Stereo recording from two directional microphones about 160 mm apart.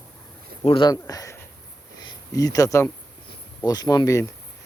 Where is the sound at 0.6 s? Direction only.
35° left (ahead or behind).